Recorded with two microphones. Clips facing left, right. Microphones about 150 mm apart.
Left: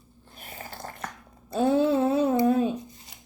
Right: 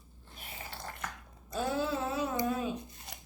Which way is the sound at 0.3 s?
45° left (ahead or behind).